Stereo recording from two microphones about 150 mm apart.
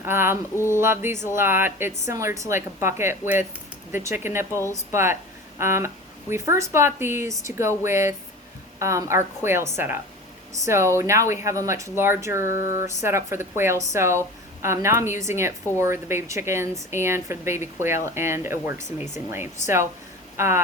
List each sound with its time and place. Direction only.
0.0 s speech: 15° right (ahead or behind)